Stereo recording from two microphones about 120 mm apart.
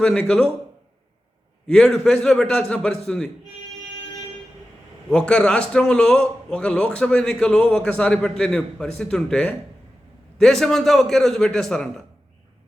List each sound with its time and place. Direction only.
0.0 s a man's voice: 5° left (ahead or behind)
1.6 s a man's voice: 5° left (ahead or behind)
5.1 s a man's voice: 5° left (ahead or behind)